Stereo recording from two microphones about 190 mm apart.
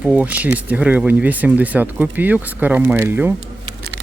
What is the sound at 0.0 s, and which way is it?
Speech, 5° right (ahead or behind).